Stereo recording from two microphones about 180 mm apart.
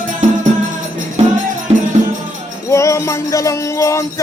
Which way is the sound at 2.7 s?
15° left (ahead or behind).